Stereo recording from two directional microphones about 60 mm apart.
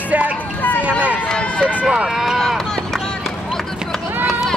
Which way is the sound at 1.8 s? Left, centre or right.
Right.